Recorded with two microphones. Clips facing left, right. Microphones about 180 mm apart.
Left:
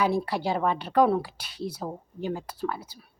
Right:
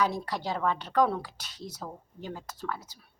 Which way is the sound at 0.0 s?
10° left (ahead or behind).